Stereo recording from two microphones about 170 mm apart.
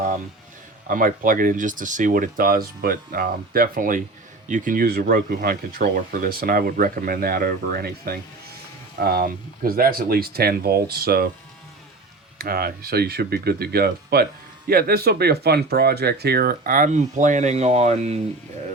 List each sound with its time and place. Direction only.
0.9 s speech: 55° right (ahead or behind)
12.4 s speech: 65° right (ahead or behind); by 18.2 s 40° right (ahead or behind)